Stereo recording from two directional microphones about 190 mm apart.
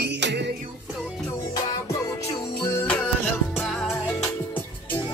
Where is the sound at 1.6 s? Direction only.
15° left (ahead or behind); by 4.2 s centre (ahead or behind).